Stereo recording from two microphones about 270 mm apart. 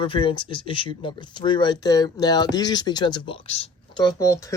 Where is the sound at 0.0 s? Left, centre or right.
Centre.